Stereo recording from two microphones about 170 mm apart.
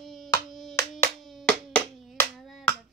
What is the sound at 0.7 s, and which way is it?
Hands, 15° left (ahead or behind).